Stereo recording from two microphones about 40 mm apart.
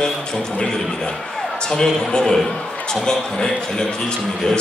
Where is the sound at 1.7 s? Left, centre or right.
Centre.